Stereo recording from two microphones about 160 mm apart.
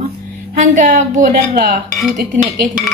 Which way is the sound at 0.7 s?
50° right (ahead or behind).